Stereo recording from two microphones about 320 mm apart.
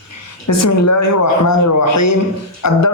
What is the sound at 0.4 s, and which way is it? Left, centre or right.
Speech, left.